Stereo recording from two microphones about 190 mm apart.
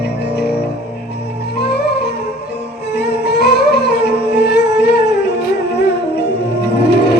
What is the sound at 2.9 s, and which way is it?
Music, 60° left (ahead or behind).